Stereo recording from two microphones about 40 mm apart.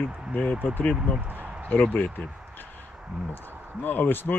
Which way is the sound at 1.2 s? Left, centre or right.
Right.